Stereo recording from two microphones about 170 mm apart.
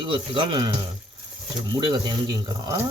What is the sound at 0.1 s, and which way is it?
Speech, 30° right (ahead or behind).